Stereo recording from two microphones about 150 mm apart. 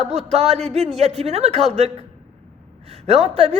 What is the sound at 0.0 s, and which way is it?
A woman's voice, 50° right (ahead or behind).